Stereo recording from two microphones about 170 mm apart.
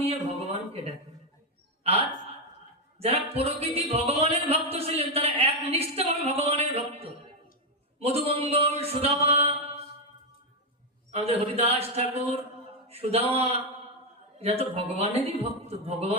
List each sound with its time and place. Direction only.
0.0 s a sound: 35° right (ahead or behind)
1.8 s a man's voice: 35° right (ahead or behind)
11.1 s speech: 35° right (ahead or behind)